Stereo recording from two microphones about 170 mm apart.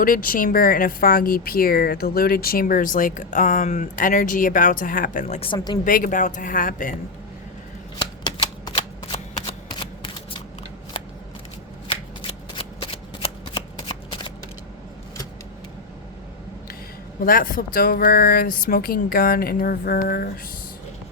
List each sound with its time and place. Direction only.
0.0 s speech: 55° left (ahead or behind)
5.5 s a woman's voice: 25° left (ahead or behind)
5.8 s speech: 50° left (ahead or behind)
7.9 s shuffling cards: 25° left (ahead or behind)
11.9 s shuffling cards: 30° left (ahead or behind)
17.2 s speech: 55° left (ahead or behind)